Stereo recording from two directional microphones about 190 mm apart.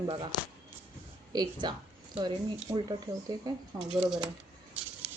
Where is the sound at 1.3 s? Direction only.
20° right (ahead or behind).